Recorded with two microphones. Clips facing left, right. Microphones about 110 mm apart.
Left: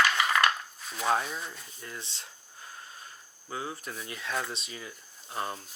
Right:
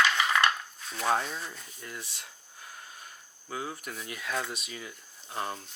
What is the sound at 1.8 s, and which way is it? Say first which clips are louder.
Speech: even; 30° left (ahead or behind).